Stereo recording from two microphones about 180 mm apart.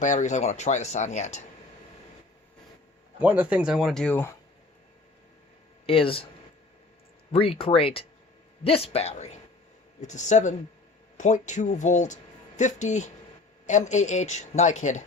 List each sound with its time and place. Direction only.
0.0 s speech: 45° left (ahead or behind)
3.2 s speech: 10° right (ahead or behind); by 4.3 s 5° left (ahead or behind)
5.8 s speech: 30° left (ahead or behind)
7.3 s speech: 30° left (ahead or behind)